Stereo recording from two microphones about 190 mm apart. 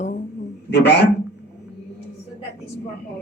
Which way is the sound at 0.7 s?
60° left (ahead or behind).